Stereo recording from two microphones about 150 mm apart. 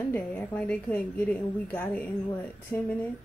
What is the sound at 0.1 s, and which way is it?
A woman's voice, 10° left (ahead or behind).